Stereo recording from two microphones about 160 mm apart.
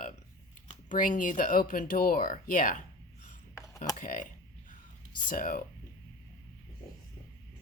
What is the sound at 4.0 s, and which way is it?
A woman's voice, 60° left (ahead or behind).